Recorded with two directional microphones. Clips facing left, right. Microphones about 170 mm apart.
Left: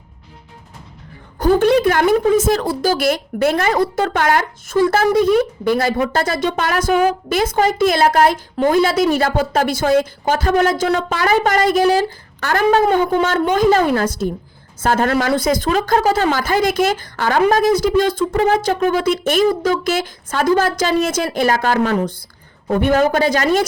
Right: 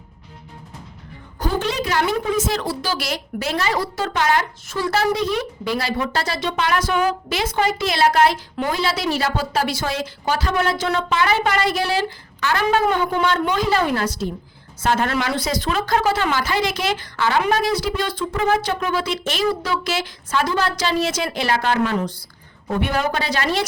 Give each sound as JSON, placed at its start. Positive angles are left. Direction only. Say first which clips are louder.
{"t": 1.4, "sound": "a woman's voice", "louder": "left 10 dB", "side_deg": 55}